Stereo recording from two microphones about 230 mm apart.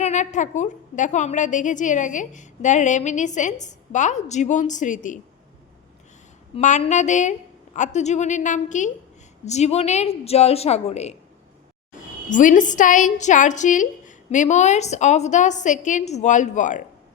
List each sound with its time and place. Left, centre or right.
0.0 s a woman's voice: left
6.6 s a woman's voice: left
12.3 s a woman's voice: left